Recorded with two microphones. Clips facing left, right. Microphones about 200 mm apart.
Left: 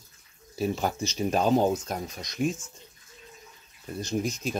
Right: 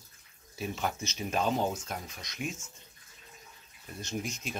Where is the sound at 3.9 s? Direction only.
35° left (ahead or behind).